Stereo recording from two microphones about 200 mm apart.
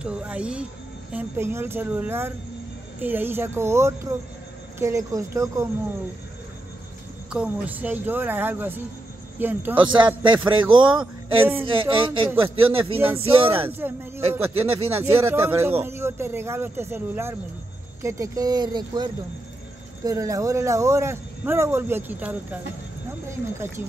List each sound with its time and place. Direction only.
0.0 s speech: 5° right (ahead or behind)
7.2 s speech: 5° right (ahead or behind)
9.8 s a man's voice: 25° right (ahead or behind)
13.7 s a man's voice: 10° right (ahead or behind)
20.1 s speech: 15° right (ahead or behind)